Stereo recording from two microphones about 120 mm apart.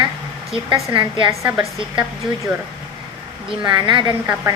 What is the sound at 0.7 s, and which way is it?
Speech, 45° right (ahead or behind).